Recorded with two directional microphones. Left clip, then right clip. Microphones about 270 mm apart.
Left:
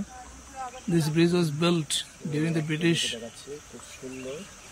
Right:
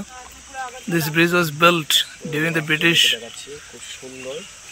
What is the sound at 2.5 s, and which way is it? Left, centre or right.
Speech, right.